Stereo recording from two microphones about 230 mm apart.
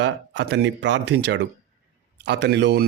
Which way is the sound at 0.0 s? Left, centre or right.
Right.